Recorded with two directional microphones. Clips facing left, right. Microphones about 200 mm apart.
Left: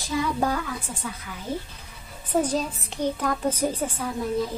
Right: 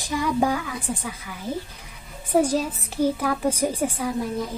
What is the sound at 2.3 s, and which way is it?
A woman's voice, 10° right (ahead or behind).